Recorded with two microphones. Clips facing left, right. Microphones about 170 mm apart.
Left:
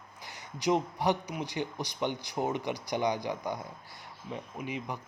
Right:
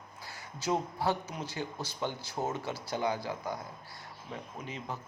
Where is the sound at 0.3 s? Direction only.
20° left (ahead or behind).